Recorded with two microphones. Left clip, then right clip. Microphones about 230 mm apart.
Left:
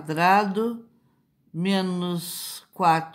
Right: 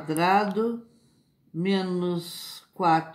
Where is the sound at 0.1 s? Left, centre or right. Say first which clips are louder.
Left 3 dB; left.